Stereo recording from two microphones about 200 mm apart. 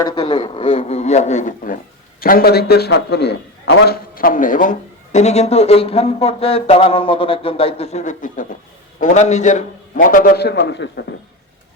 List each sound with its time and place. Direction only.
0.0 s a man's voice: 25° left (ahead or behind); by 11.0 s 60° left (ahead or behind)